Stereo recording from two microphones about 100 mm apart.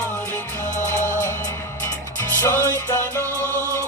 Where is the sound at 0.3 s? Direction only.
25° left (ahead or behind).